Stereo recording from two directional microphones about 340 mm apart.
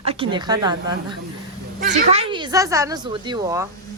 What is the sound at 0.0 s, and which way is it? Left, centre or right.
Speech, centre.